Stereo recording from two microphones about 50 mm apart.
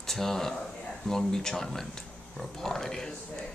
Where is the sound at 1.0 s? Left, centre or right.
Centre.